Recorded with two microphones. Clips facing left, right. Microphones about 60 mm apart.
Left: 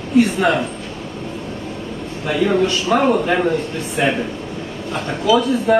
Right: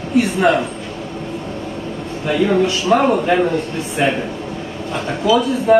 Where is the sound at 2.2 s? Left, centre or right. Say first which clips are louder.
Right 1 dB; centre.